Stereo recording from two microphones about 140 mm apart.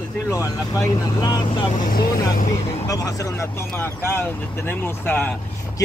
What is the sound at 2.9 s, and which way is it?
Speech, 25° left (ahead or behind).